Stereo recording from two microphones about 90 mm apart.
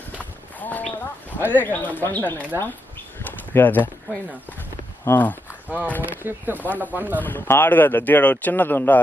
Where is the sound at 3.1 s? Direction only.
20° left (ahead or behind).